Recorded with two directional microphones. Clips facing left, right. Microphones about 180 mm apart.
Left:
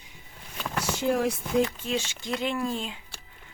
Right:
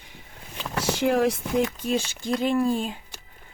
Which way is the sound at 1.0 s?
75° right (ahead or behind).